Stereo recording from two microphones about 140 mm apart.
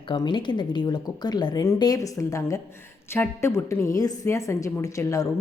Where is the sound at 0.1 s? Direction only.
35° left (ahead or behind).